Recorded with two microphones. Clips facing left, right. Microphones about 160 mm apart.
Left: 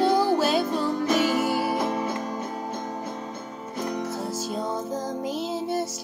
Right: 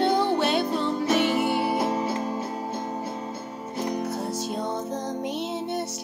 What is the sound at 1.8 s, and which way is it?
Music, 30° right (ahead or behind).